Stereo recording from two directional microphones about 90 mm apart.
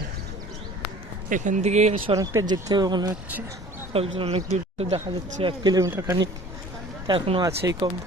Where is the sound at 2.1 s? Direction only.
70° right (ahead or behind).